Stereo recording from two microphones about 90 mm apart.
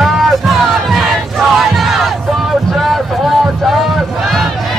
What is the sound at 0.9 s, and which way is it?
Battle cry, centre (ahead or behind).